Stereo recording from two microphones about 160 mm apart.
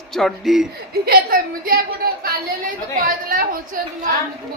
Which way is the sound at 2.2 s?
60° right (ahead or behind).